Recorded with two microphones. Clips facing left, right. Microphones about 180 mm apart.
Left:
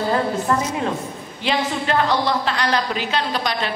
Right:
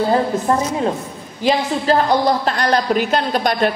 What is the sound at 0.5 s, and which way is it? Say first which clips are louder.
A woman's voice: right 3 dB; 35° right (ahead or behind).